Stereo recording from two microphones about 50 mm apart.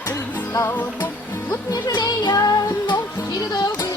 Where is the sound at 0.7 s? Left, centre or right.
Left.